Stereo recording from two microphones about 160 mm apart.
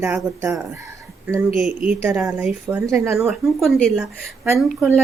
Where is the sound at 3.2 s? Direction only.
Centre (ahead or behind).